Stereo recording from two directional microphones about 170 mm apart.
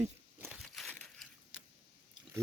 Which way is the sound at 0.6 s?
Centre (ahead or behind).